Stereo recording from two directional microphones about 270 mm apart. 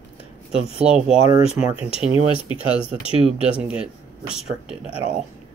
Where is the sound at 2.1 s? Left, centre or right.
Centre.